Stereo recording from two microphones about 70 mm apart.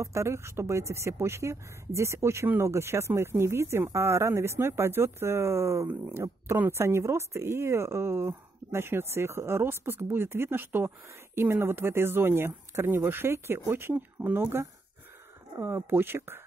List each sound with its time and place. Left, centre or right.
0.0 s speech: right